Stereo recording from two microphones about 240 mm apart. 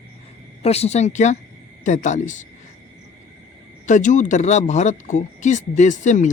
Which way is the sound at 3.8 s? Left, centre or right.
Left.